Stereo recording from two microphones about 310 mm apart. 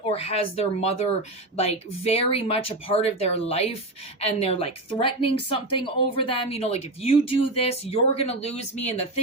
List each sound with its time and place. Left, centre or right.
0.1 s speech: centre
2.0 s a woman's voice: centre